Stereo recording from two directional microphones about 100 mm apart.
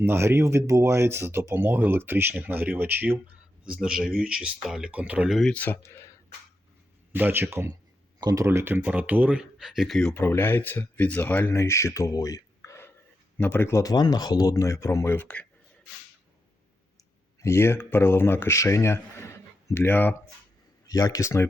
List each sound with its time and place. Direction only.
0.0 s speech: 25° right (ahead or behind)
3.7 s speech: 10° right (ahead or behind)
5.3 s speech: 5° left (ahead or behind)
5.5 s speech: 20° left (ahead or behind)
7.1 s speech: 20° right (ahead or behind)
8.2 s speech: 40° right (ahead or behind)
8.4 s speech: 20° right (ahead or behind); by 10.2 s 5° left (ahead or behind)
10.2 s speech: 20° left (ahead or behind)
11.5 s speech: 30° left (ahead or behind)
17.4 s speech: 25° left (ahead or behind)
20.8 s speech: 40° left (ahead or behind)